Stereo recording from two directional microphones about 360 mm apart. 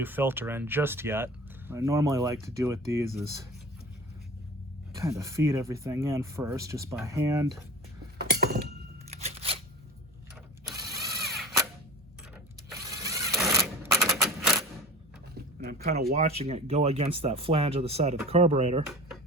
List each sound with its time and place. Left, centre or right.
0.0 s speech: centre
4.9 s speech: centre
8.2 s a sound: right
9.1 s scissors: centre
11.2 s mechanisms: centre
12.8 s a sound: centre
15.6 s speech: right
18.9 s dishes: centre